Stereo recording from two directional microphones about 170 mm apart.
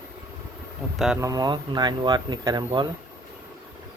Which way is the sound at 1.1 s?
20° right (ahead or behind).